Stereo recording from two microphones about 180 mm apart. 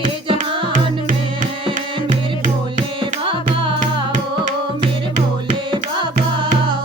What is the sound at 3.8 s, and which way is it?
Music, 45° right (ahead or behind).